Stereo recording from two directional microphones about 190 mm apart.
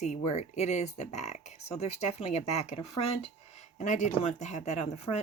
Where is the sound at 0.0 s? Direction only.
35° left (ahead or behind).